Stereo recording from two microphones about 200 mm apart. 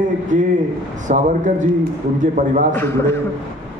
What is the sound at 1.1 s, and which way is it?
A man's voice, 40° right (ahead or behind).